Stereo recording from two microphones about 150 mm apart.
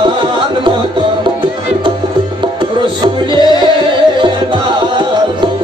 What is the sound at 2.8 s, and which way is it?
Music, 30° right (ahead or behind).